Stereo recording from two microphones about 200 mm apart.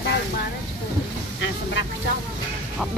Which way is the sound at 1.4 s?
65° left (ahead or behind).